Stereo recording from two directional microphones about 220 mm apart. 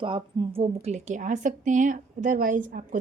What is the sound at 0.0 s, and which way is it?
A woman's voice, 25° right (ahead or behind).